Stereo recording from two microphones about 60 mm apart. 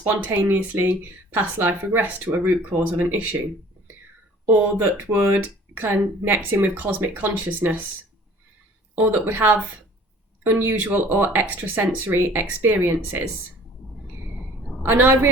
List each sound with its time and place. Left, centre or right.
0.0 s speech: right
4.4 s speech: right
9.0 s speech: right
14.8 s speech: right